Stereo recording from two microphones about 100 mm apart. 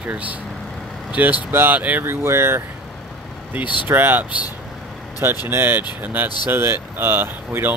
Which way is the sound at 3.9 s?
20° right (ahead or behind).